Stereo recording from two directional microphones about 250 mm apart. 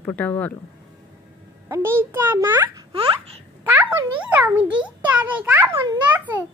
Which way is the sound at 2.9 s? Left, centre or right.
Right.